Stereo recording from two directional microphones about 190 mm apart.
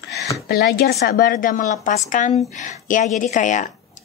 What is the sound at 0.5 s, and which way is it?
A woman's voice, 55° left (ahead or behind).